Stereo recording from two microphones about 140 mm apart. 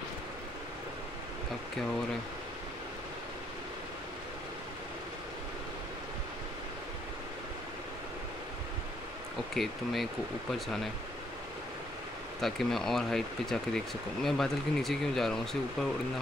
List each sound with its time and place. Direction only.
9.5 s speech: centre (ahead or behind)
12.4 s speech: centre (ahead or behind)